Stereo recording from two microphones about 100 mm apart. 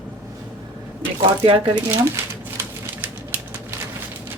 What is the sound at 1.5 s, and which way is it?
Speech, 55° right (ahead or behind).